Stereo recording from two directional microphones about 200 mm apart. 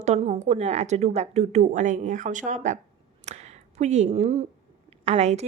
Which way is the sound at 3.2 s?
35° right (ahead or behind).